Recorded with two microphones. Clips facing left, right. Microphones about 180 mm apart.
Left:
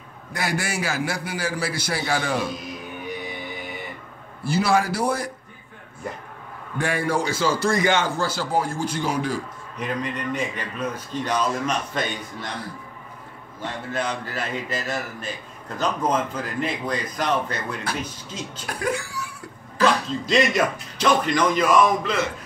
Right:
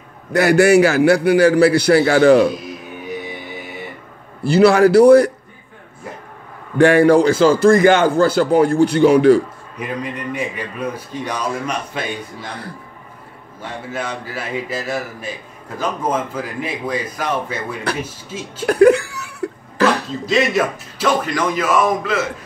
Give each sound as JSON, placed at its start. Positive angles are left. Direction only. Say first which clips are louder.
{"t": 0.3, "sound": "a man's voice", "louder": "right 16 dB", "side_deg": -70}
{"t": 4.5, "sound": "a man's voice", "louder": "right 10 dB", "side_deg": -70}
{"t": 6.8, "sound": "a man's voice", "louder": "right 13 dB", "side_deg": -70}
{"t": 9.8, "sound": "a man's voice", "louder": "right 2 dB", "side_deg": -10}
{"t": 13.6, "sound": "a man's voice", "louder": "right 1 dB", "side_deg": -10}
{"t": 18.6, "sound": "a man's voice", "louder": "right 16 dB", "side_deg": -65}
{"t": 19.4, "sound": "cat", "louder": "right 16 dB", "side_deg": -65}
{"t": 20.2, "sound": "a man's voice", "louder": "right 3 dB", "side_deg": -5}